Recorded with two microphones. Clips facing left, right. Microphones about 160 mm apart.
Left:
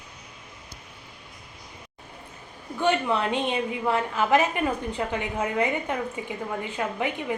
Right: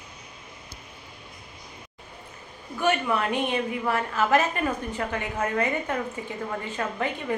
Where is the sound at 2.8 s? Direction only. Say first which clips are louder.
Left 1 dB; 20° left (ahead or behind).